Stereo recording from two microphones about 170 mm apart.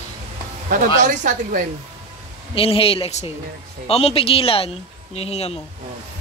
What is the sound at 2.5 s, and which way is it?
Speech, 35° left (ahead or behind).